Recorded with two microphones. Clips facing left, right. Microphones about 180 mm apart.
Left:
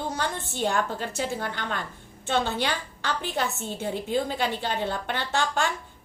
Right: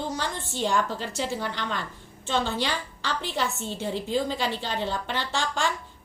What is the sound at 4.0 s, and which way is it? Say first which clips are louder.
A woman's voice: even; 55° left (ahead or behind).